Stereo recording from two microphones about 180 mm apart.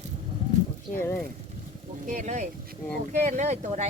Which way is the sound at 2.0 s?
40° right (ahead or behind).